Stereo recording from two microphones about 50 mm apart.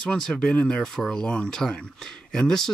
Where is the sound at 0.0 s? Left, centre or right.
Centre.